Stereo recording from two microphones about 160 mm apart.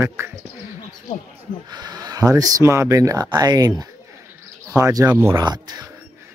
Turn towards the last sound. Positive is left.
turn(degrees=-25)  # may be behind; listen again after turning